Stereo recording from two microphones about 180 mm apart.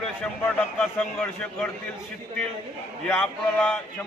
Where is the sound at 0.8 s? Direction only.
5° left (ahead or behind).